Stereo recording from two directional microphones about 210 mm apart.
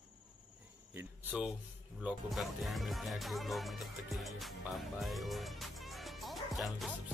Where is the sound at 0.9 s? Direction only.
10° right (ahead or behind).